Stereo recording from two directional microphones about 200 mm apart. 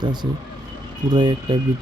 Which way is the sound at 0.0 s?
20° right (ahead or behind).